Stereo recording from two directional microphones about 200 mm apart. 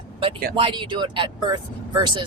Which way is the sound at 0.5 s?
25° right (ahead or behind).